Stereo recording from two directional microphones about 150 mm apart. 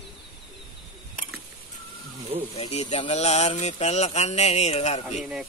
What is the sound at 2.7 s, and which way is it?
Speech, 45° left (ahead or behind).